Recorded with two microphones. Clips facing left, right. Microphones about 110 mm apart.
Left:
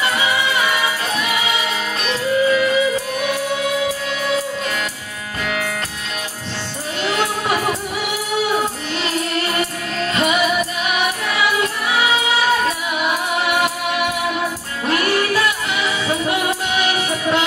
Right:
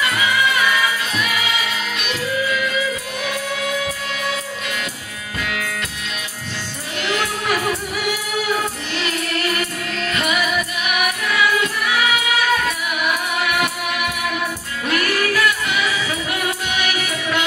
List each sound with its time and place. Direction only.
0.0 s music: 30° left (ahead or behind)
5.4 s music: 30° left (ahead or behind)
7.0 s music: 30° left (ahead or behind)